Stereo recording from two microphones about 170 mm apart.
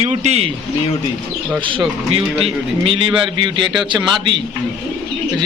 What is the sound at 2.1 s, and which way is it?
A man's voice, 35° right (ahead or behind).